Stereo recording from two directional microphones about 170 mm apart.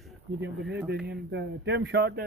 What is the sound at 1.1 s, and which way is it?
Speech, 90° right.